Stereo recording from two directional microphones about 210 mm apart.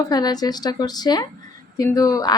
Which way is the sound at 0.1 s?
20° left (ahead or behind).